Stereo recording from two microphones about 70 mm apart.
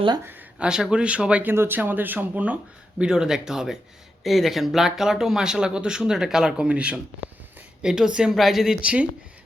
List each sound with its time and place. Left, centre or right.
0.6 s speech: centre
1.5 s speech: right; by 8.9 s centre